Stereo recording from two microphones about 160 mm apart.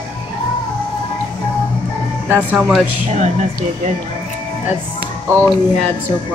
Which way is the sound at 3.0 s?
45° right (ahead or behind).